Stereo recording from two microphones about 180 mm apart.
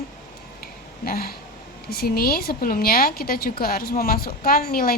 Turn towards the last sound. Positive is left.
turn(degrees=55)  # may be behind; listen again after turning